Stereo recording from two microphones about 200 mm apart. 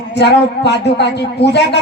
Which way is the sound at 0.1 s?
55° left (ahead or behind).